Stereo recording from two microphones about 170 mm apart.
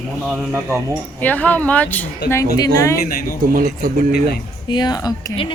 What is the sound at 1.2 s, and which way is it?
Speech, 10° left (ahead or behind).